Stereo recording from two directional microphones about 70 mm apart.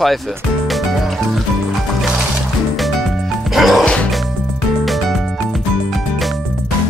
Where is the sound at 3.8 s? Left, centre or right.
Centre.